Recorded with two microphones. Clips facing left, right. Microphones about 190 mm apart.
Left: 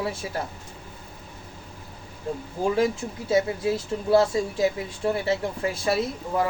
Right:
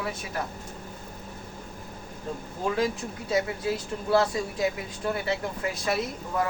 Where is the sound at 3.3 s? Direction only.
25° left (ahead or behind).